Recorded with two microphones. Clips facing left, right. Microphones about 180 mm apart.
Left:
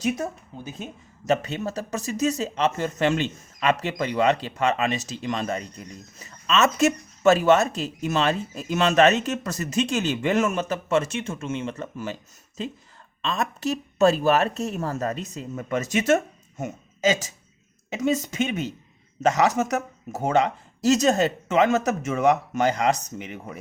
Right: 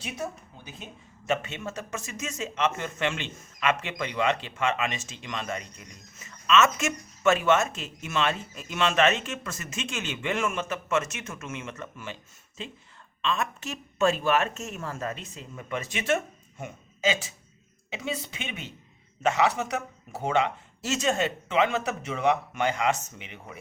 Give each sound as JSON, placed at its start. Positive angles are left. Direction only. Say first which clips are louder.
{"t": 1.2, "sound": "speech", "louder": "left 5 dB", "side_deg": 40}